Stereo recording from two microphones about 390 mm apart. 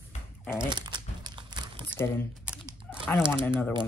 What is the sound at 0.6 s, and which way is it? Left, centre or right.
Crumpling, centre.